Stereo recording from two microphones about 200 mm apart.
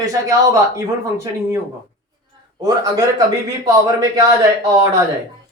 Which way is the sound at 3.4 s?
15° right (ahead or behind).